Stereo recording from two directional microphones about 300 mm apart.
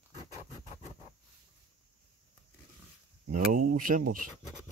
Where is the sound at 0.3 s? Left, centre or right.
Centre.